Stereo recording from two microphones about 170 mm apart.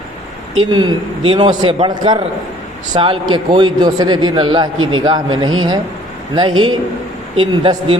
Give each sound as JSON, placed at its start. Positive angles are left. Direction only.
{"t": 0.6, "sound": "a man's voice", "side_deg": -25}